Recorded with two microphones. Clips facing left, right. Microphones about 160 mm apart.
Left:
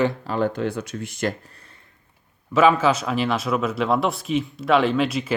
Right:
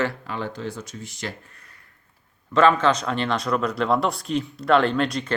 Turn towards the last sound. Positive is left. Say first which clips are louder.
# left 1 dB
turn(degrees=5)  # may be behind; listen again after turning